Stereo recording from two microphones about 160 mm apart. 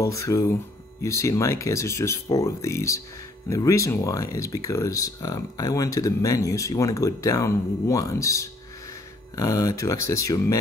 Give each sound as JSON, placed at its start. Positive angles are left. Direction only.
{"t": 0.0, "sound": "speech", "side_deg": 20}